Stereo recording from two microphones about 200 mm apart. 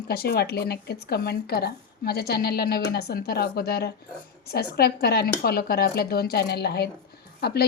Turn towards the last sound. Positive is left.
turn(degrees=55)  # may be behind; listen again after turning